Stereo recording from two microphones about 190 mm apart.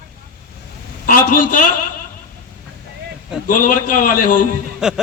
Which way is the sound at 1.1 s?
45° left (ahead or behind).